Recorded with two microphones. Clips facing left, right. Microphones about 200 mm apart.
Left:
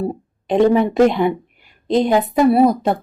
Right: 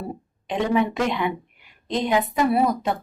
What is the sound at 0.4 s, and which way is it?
A woman's voice, 35° left (ahead or behind).